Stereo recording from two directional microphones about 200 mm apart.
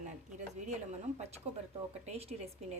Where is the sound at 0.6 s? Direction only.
35° right (ahead or behind).